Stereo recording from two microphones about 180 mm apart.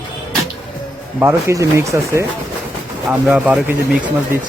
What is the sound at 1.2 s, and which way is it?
Speech, 15° right (ahead or behind).